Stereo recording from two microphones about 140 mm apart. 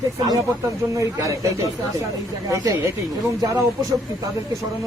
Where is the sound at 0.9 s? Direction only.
20° right (ahead or behind).